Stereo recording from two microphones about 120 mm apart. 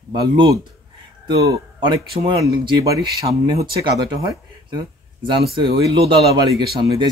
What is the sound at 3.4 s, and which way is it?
Speech, 40° right (ahead or behind).